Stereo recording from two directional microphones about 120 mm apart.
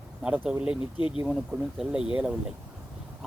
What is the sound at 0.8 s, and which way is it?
Speech, 45° left (ahead or behind).